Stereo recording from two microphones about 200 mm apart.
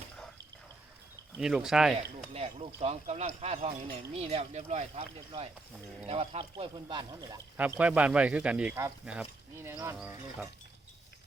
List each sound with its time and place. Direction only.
1.4 s speech: 5° right (ahead or behind)
2.3 s speech: 30° right (ahead or behind)
7.5 s speech: 10° right (ahead or behind)